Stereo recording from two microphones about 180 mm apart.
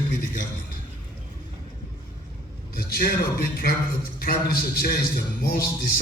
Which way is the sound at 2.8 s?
60° left (ahead or behind).